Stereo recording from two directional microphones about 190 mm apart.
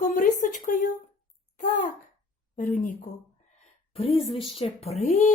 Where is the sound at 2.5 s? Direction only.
45° left (ahead or behind).